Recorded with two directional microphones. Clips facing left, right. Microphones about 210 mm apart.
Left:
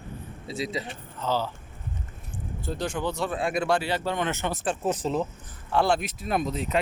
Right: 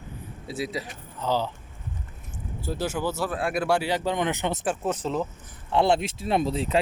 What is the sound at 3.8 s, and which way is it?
Speech, 15° right (ahead or behind).